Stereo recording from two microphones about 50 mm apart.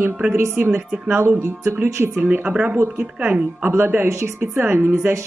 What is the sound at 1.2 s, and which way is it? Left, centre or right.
Speech, right.